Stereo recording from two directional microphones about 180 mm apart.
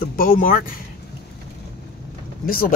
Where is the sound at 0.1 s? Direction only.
50° left (ahead or behind).